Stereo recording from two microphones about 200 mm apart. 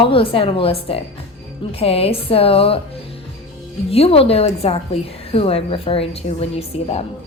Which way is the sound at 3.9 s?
30° left (ahead or behind).